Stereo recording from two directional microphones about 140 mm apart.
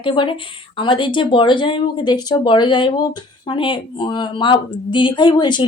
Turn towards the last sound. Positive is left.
turn(degrees=35)  # may be behind; listen again after turning